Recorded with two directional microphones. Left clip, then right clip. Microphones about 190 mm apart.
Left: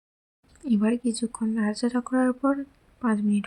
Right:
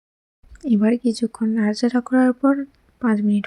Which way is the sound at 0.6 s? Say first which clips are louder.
Right 6 dB; 20° right (ahead or behind).